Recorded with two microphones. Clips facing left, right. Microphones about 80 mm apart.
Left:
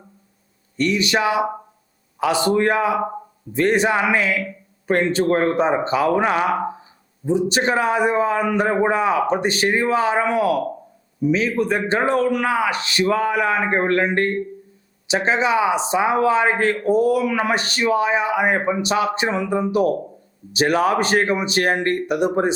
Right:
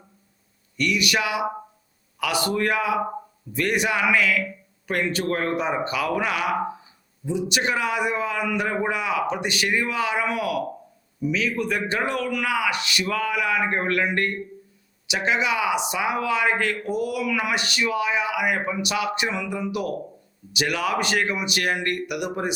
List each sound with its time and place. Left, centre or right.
0.8 s a man's voice: left